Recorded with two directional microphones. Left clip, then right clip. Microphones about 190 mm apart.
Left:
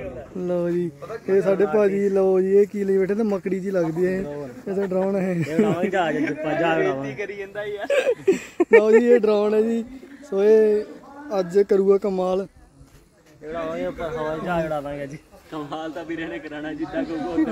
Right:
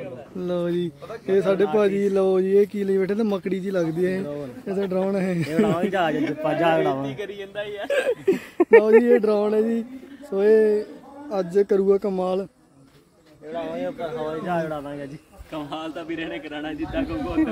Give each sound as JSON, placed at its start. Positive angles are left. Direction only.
{"t": 0.4, "sound": "speech", "side_deg": 5}
{"t": 5.5, "sound": "speech", "side_deg": -50}
{"t": 7.5, "sound": "speech", "side_deg": 0}
{"t": 13.5, "sound": "a man's voice", "side_deg": 50}
{"t": 15.5, "sound": "a man's voice", "side_deg": -40}